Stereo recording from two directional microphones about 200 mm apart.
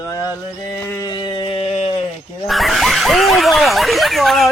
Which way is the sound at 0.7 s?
15° left (ahead or behind).